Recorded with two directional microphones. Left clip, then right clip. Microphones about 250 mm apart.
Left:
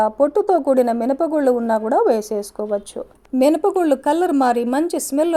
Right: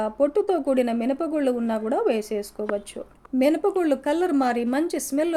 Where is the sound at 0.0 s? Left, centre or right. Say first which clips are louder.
Left 6 dB; centre.